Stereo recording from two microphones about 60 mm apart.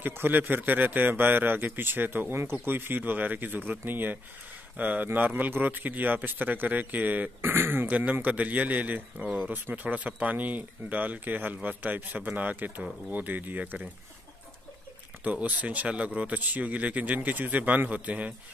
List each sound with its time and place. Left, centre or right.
0.0 s a man's voice: right
7.9 s speech: right
15.2 s speech: right